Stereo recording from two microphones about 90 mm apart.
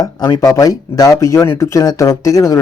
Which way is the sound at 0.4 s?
40° left (ahead or behind).